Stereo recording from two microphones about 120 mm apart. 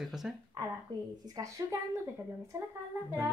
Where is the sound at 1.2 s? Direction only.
30° right (ahead or behind).